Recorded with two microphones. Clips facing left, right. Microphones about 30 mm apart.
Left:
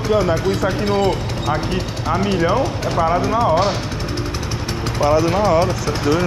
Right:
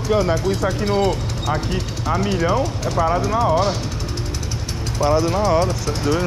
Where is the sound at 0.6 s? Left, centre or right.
Left.